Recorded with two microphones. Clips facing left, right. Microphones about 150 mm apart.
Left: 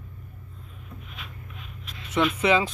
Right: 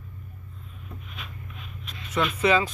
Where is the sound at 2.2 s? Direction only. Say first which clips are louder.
Left 1 dB; 20° left (ahead or behind).